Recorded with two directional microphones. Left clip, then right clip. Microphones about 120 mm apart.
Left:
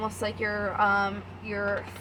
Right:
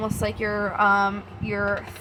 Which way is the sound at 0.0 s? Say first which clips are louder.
Right 3 dB; 50° right (ahead or behind).